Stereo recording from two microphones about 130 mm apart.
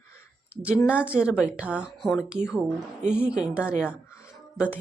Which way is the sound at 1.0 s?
10° right (ahead or behind).